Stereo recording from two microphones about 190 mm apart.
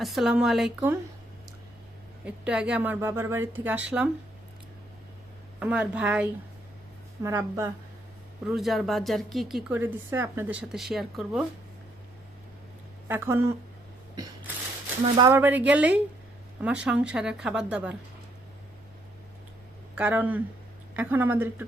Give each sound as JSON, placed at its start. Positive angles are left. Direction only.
{"t": 0.0, "sound": "a woman's voice", "side_deg": 0}
{"t": 2.2, "sound": "speech", "side_deg": -5}
{"t": 5.5, "sound": "speech", "side_deg": -5}
{"t": 8.4, "sound": "a woman's voice", "side_deg": 0}
{"t": 13.1, "sound": "speech", "side_deg": -10}
{"t": 15.0, "sound": "speech", "side_deg": -25}
{"t": 15.4, "sound": "speech", "side_deg": -10}
{"t": 20.0, "sound": "speech", "side_deg": -10}